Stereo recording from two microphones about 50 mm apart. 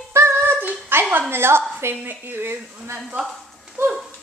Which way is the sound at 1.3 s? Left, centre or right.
Right.